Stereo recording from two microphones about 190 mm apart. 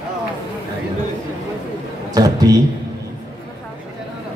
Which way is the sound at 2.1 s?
20° right (ahead or behind).